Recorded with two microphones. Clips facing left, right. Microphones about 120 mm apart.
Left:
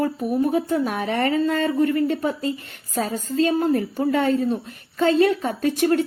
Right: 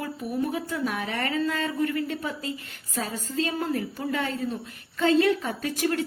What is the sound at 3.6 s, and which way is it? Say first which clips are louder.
A woman's voice: left 8 dB; 40° left (ahead or behind).